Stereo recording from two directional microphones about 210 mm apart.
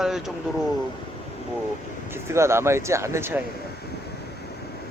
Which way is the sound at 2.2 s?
15° right (ahead or behind).